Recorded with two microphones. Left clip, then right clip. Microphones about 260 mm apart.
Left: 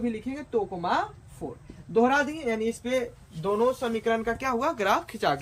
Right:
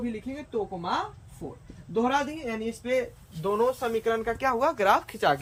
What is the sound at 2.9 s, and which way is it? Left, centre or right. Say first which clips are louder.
Speech: right 1 dB; centre.